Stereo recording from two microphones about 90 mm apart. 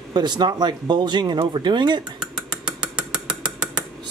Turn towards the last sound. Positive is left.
turn(degrees=-15)  # may be behind; listen again after turning